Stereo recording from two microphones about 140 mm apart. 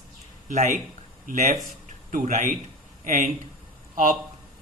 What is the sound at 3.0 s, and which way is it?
Speech, 65° right (ahead or behind).